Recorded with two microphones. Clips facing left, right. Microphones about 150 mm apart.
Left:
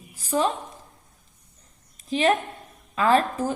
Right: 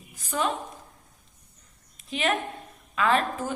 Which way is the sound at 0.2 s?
35° left (ahead or behind).